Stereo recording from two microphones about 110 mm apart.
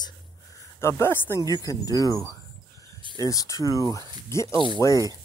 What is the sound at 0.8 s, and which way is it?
Speech, 25° left (ahead or behind).